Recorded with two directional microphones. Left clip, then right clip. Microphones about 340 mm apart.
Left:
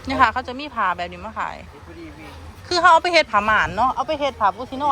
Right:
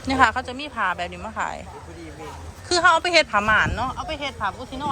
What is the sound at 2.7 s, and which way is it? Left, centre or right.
Speech, centre.